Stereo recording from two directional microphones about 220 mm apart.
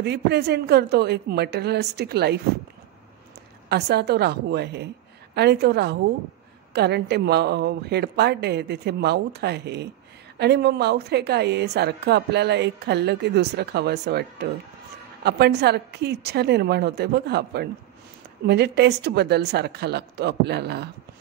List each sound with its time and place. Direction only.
0.0 s a woman's voice: 50° right (ahead or behind)
3.6 s a woman's voice: 50° right (ahead or behind)